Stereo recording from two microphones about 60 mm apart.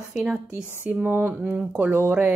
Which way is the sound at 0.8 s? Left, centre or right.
Right.